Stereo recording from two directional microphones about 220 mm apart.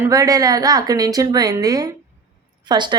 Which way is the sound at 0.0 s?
15° right (ahead or behind).